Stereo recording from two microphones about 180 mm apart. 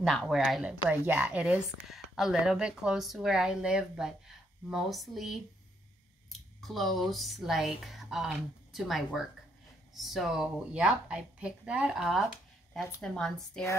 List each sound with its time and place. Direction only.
0.0 s a woman's voice: centre (ahead or behind)